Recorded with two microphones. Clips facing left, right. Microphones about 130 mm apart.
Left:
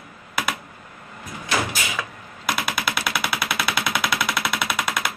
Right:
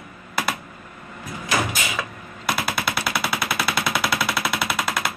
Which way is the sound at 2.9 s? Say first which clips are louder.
Right 1 dB; 30° right (ahead or behind).